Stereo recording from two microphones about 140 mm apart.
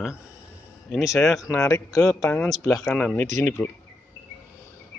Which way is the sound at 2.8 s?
5° left (ahead or behind).